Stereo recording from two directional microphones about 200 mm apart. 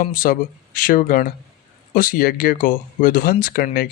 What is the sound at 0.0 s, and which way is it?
Speech, 45° left (ahead or behind).